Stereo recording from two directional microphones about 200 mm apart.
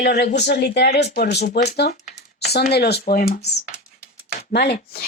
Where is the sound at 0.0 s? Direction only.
55° left (ahead or behind).